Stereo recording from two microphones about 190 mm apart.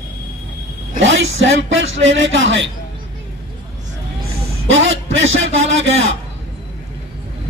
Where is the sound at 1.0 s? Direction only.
80° right.